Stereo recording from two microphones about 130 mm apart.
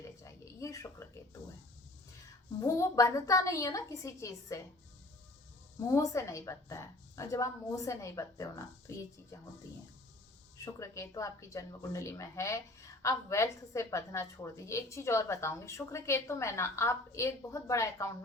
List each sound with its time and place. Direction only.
0.2 s a sound: 25° left (ahead or behind)
2.6 s a woman's voice: 25° left (ahead or behind)
5.8 s a woman's voice: 25° left (ahead or behind)
10.8 s a woman's voice: 25° left (ahead or behind)